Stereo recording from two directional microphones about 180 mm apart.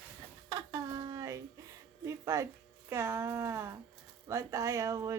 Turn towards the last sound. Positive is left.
turn(degrees=-15)  # may be behind; listen again after turning